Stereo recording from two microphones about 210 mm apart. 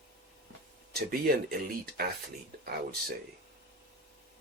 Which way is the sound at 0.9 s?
45° right (ahead or behind).